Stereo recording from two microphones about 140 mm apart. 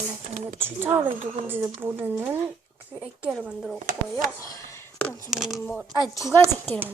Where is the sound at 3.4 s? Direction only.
5° right (ahead or behind).